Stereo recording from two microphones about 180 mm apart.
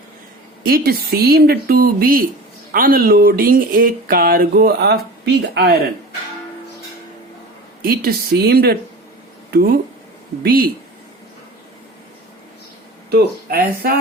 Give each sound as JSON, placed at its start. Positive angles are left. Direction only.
{"t": 0.6, "sound": "speech", "side_deg": -55}
{"t": 7.8, "sound": "speech", "side_deg": -55}
{"t": 13.1, "sound": "speech", "side_deg": -60}